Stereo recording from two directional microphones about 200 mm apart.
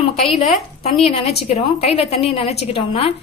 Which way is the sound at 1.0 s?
30° left (ahead or behind).